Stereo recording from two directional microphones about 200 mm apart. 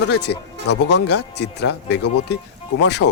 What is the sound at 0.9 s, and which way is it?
Speech, 55° left (ahead or behind).